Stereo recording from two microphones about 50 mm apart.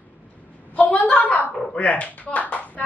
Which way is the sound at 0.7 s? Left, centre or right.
Left.